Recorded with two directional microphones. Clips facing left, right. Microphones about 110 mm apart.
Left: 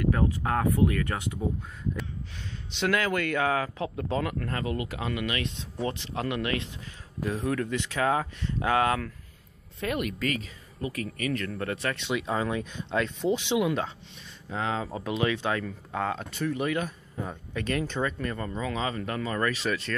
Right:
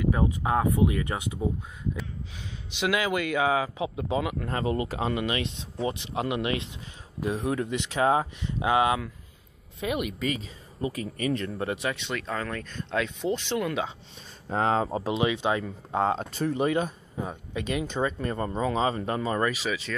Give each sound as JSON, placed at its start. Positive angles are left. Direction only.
{"t": 0.0, "sound": "speech", "side_deg": -15}
{"t": 2.7, "sound": "speech", "side_deg": -10}
{"t": 4.5, "sound": "speech", "side_deg": -25}
{"t": 11.5, "sound": "speech", "side_deg": -15}
{"t": 12.1, "sound": "speech", "side_deg": 10}
{"t": 12.9, "sound": "speech", "side_deg": 0}
{"t": 14.5, "sound": "speech", "side_deg": -40}
{"t": 15.0, "sound": "speech", "side_deg": -25}
{"t": 17.3, "sound": "speech", "side_deg": -15}
{"t": 19.5, "sound": "speech", "side_deg": -5}